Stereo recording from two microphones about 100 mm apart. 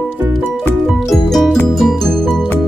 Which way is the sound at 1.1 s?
Centre (ahead or behind).